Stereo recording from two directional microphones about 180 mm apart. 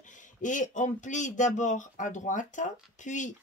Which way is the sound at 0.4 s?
45° left (ahead or behind).